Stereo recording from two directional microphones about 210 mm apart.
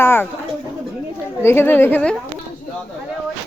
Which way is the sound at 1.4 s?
10° left (ahead or behind).